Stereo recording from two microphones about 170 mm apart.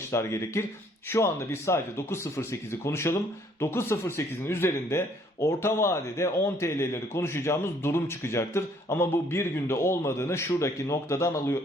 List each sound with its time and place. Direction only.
0.1 s speech: 15° left (ahead or behind)